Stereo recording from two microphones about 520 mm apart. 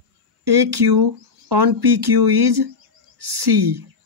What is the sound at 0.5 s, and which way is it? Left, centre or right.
Speech, right.